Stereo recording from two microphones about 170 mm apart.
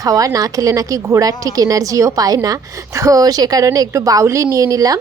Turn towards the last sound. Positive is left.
turn(degrees=-20)  # may be behind; listen again after turning